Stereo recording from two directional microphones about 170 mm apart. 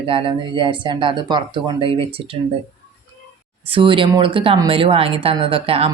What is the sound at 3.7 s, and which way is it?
Speech, 30° right (ahead or behind).